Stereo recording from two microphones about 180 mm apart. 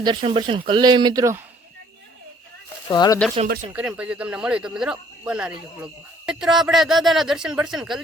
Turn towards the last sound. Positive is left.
turn(degrees=0)  # may be behind; listen again after turning